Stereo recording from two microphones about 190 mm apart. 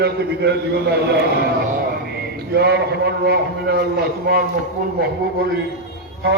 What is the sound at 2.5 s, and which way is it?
A man's voice, 60° right (ahead or behind).